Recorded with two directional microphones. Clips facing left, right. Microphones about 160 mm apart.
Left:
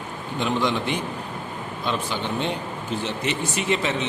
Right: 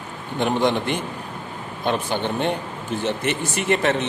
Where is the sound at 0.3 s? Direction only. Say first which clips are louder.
Right 3 dB; 55° right (ahead or behind).